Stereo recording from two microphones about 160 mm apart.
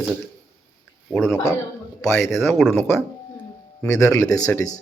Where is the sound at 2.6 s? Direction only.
15° left (ahead or behind).